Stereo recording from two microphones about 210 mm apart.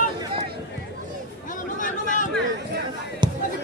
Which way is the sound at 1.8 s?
40° left (ahead or behind).